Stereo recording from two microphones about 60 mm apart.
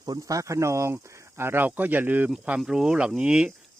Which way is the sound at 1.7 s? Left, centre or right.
Right.